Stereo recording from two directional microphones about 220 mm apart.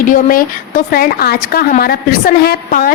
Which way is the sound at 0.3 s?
40° left (ahead or behind).